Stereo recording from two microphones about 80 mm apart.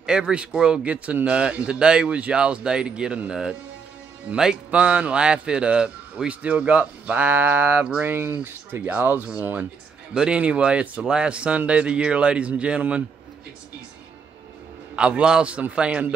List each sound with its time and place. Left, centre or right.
0.0 s speech: centre
8.1 s speech: right
10.1 s speech: centre
15.0 s speech: centre